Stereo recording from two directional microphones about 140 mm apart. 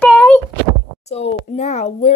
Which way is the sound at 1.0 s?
50° left (ahead or behind).